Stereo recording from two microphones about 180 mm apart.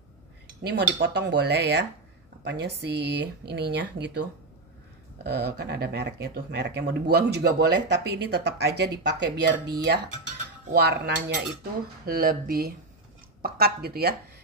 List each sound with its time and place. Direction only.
0.7 s speech: 75° right (ahead or behind)
5.2 s speech: 65° right (ahead or behind)
10.7 s speech: 65° right (ahead or behind)
12.1 s speech: 55° right (ahead or behind)